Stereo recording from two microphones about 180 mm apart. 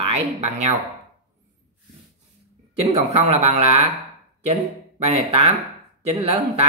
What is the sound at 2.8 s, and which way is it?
Speech, 35° right (ahead or behind).